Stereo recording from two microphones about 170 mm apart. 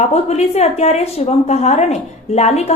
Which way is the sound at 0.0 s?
40° left (ahead or behind).